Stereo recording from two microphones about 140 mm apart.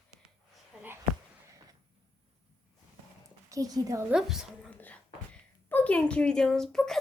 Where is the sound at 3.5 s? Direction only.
25° right (ahead or behind).